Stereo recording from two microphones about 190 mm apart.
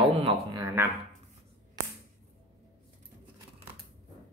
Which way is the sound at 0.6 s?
15° right (ahead or behind).